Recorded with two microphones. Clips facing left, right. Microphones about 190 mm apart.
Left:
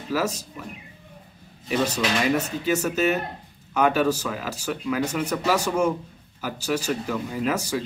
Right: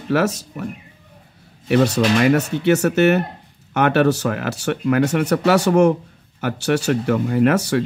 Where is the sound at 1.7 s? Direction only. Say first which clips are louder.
Right 8 dB; 65° right (ahead or behind).